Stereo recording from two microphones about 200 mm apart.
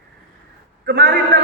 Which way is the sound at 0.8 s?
50° right (ahead or behind).